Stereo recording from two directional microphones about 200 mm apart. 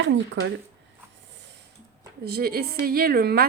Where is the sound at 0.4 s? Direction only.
70° right (ahead or behind).